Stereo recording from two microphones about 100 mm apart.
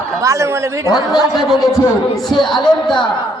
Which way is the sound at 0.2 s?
30° right (ahead or behind).